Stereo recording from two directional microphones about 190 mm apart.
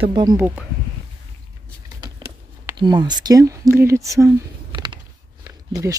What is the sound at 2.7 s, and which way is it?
Speech, 25° right (ahead or behind).